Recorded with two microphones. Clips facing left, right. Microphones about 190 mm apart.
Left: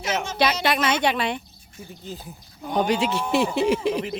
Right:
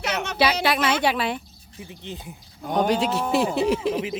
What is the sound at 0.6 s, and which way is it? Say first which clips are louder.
Speech: even; centre (ahead or behind).